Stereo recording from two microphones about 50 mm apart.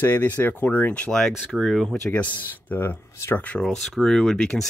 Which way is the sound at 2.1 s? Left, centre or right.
Left.